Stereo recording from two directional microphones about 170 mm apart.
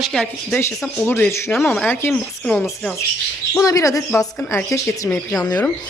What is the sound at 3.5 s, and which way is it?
Speech, 20° left (ahead or behind).